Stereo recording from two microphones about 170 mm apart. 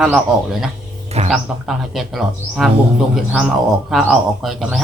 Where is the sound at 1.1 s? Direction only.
40° right (ahead or behind).